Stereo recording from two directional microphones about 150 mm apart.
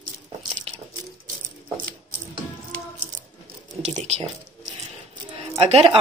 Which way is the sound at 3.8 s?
50° right (ahead or behind).